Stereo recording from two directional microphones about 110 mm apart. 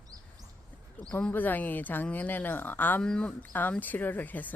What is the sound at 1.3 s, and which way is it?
Speech, 15° left (ahead or behind).